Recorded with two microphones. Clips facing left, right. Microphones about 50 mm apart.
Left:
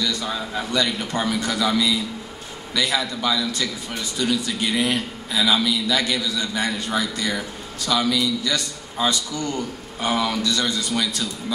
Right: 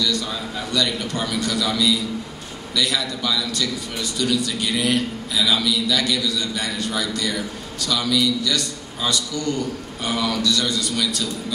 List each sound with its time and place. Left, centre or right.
0.0 s a man's voice: left